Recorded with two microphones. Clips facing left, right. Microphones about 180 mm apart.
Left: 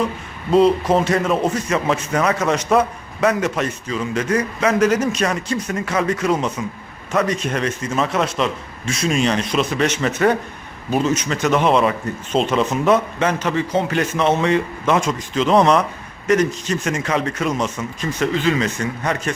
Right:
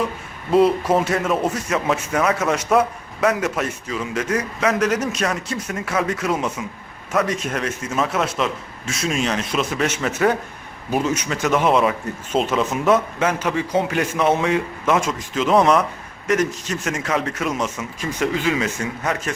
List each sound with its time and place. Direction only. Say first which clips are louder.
0.5 s speech: left 2 dB; 5° right (ahead or behind)